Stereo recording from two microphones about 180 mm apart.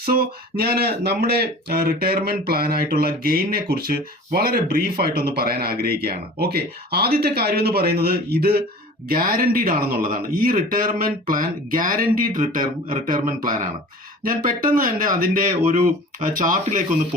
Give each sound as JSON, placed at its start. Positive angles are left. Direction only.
{"t": 0.0, "sound": "speech", "side_deg": -55}